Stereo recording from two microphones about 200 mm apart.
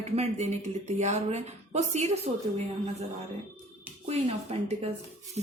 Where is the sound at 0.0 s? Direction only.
35° right (ahead or behind).